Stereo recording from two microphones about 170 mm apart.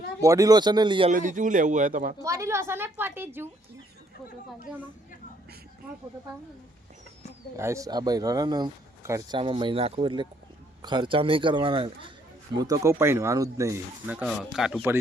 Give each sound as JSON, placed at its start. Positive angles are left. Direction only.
{"t": 0.2, "sound": "speech", "side_deg": -20}
{"t": 1.1, "sound": "a man's voice", "side_deg": -50}
{"t": 2.2, "sound": "speech", "side_deg": -15}
{"t": 7.5, "sound": "a man's voice", "side_deg": -20}
{"t": 12.5, "sound": "speech", "side_deg": -20}